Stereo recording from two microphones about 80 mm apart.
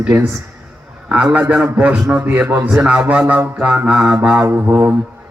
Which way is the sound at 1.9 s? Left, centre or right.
Centre.